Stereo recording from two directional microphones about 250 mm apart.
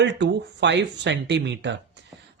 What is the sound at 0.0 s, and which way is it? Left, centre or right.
Speech, right.